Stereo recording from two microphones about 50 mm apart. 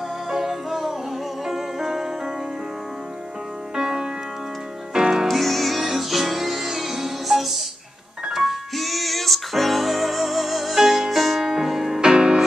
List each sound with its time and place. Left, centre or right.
0.3 s music: centre
3.7 s music: centre
5.3 s music: centre
12.0 s music: centre